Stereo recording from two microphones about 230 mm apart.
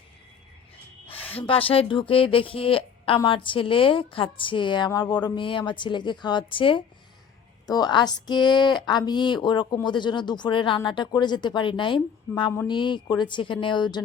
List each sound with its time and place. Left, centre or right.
1.3 s speech: left